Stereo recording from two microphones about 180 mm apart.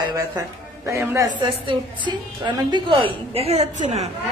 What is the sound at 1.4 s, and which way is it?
A woman's voice, 25° right (ahead or behind).